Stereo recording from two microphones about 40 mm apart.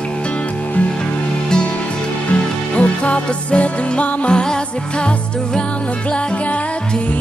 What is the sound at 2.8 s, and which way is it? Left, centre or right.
Music, left.